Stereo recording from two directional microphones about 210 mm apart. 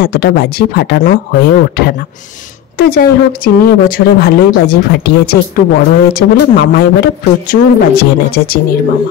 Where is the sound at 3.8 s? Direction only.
45° left (ahead or behind).